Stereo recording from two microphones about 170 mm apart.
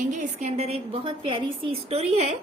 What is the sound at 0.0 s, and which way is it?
A woman's voice, 45° right (ahead or behind).